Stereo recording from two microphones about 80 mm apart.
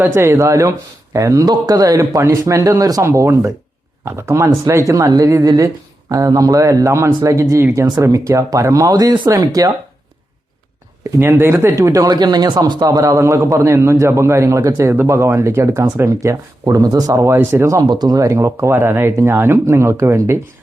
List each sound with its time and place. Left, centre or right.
0.0 s a man's voice: right
3.0 s a man's voice: right
5.0 s a man's voice: right
11.0 s speech: right
11.8 s a man's voice: right
12.1 s a man's voice: right
17.8 s speech: right
18.2 s a man's voice: right